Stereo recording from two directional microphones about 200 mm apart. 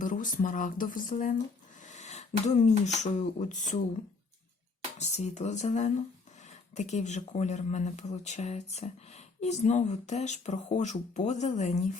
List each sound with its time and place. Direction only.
0.0 s speech: 40° left (ahead or behind)
1.9 s a sound: 35° left (ahead or behind)
3.0 s speech: 35° left (ahead or behind)
4.9 s speech: 35° left (ahead or behind)